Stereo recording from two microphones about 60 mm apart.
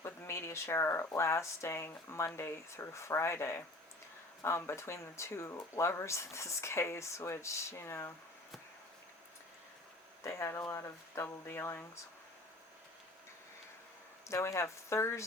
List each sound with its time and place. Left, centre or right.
0.2 s speech: left
10.2 s speech: left
14.3 s speech: left